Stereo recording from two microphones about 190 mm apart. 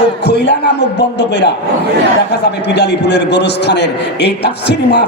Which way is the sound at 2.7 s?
65° left (ahead or behind).